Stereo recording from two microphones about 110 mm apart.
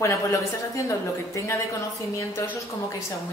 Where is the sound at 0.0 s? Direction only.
25° left (ahead or behind).